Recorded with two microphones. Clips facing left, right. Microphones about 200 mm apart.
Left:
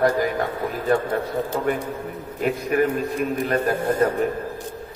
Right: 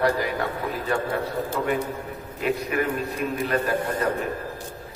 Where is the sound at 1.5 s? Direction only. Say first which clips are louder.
Even; 45° left (ahead or behind).